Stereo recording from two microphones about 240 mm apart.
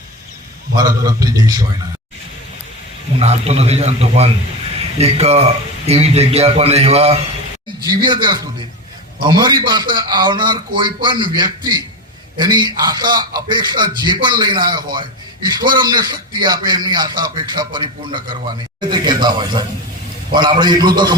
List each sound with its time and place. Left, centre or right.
0.8 s a man's voice: centre
3.2 s a man's voice: right